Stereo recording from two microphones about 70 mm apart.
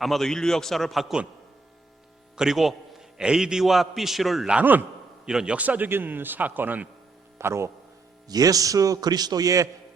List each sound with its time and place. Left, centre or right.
0.0 s a man's voice: centre
2.3 s a man's voice: centre
4.6 s speech: right
5.2 s a man's voice: centre
5.5 s speech: right
7.3 s a man's voice: right
8.3 s a man's voice: right